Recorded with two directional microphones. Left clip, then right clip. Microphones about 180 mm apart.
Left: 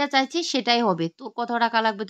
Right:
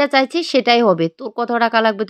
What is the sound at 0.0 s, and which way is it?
Speech, 25° right (ahead or behind).